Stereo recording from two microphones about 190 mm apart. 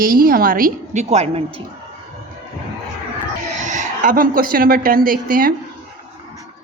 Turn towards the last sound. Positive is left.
turn(degrees=-45)  # may be behind; listen again after turning